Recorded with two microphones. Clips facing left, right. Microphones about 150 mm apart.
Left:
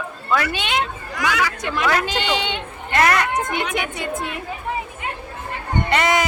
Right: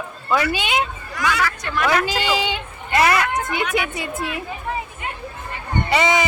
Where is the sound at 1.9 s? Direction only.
5° right (ahead or behind).